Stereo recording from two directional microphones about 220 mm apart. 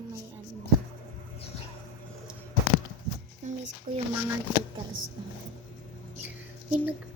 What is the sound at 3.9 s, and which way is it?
Speech, 35° right (ahead or behind).